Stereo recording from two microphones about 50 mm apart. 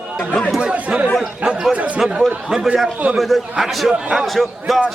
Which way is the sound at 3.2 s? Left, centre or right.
Centre.